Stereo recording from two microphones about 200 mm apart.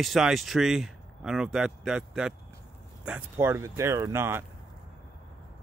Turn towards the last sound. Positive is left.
turn(degrees=-10)  # may be behind; listen again after turning